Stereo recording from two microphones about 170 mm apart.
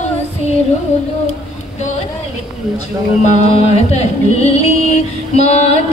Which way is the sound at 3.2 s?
40° left (ahead or behind).